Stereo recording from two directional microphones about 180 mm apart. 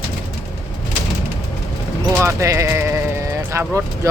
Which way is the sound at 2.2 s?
15° right (ahead or behind).